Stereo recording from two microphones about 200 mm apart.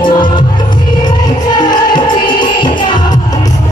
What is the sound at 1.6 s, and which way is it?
Music, 20° left (ahead or behind).